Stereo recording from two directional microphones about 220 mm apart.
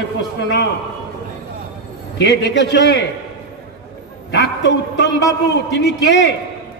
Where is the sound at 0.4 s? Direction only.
50° left (ahead or behind).